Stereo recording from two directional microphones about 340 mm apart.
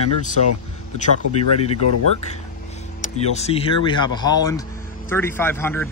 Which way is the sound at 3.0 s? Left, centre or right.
Centre.